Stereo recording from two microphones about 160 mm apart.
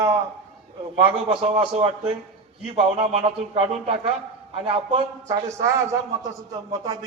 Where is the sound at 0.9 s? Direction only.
35° right (ahead or behind).